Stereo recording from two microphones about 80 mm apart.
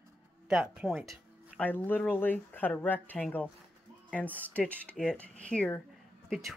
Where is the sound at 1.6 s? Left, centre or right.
Left.